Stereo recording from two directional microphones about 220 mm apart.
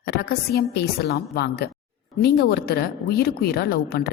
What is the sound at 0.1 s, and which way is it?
A woman's voice, 45° left (ahead or behind).